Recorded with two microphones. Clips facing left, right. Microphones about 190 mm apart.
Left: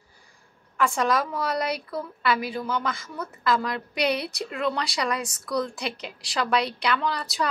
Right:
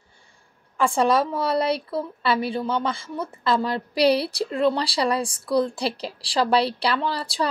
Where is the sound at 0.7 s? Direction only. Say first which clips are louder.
Right 4 dB; 30° right (ahead or behind).